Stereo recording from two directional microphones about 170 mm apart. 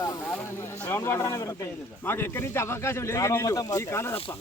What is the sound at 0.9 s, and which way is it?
Speech, 15° left (ahead or behind).